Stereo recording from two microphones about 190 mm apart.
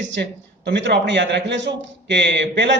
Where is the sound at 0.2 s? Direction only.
60° right (ahead or behind).